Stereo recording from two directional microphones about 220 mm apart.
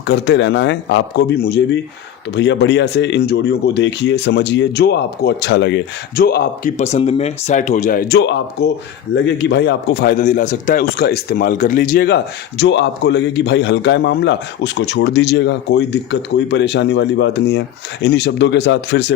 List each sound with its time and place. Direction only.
0.1 s a man's voice: 50° left (ahead or behind)
6.7 s a man's voice: 30° left (ahead or behind); by 19.1 s 50° left (ahead or behind)